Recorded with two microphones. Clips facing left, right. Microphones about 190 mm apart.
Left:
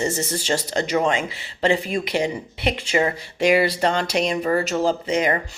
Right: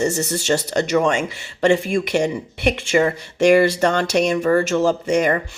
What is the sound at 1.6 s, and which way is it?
Speech, 50° right (ahead or behind).